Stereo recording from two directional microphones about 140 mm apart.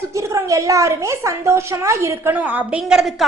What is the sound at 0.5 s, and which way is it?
A woman's voice, 20° right (ahead or behind).